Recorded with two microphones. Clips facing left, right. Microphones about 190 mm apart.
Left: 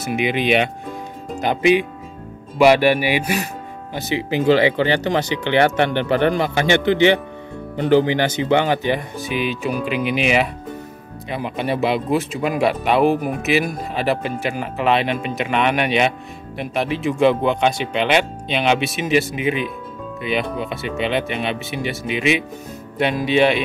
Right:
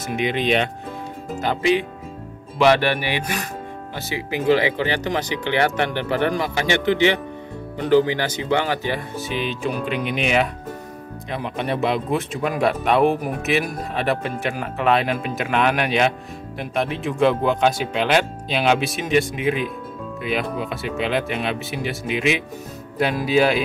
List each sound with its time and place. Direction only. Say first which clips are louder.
0.0 s speech: left 2 dB; 10° left (ahead or behind)
3.9 s speech: left 6 dB; 25° left (ahead or behind); by 23.6 s centre (ahead or behind)